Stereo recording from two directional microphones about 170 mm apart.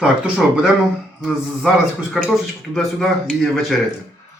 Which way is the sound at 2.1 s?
Centre (ahead or behind).